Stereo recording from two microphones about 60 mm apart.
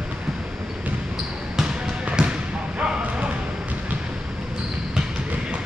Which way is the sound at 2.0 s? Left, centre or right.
Centre.